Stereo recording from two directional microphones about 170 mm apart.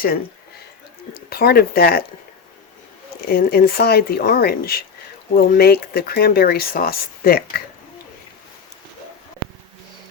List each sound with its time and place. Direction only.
1.1 s speech: 65° left (ahead or behind)
3.2 s speech: 65° left (ahead or behind)